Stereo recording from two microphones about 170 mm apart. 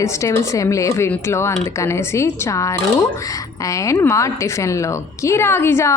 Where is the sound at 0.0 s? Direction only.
15° left (ahead or behind).